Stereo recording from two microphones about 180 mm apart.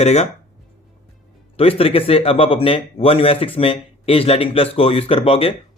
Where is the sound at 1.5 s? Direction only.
30° left (ahead or behind).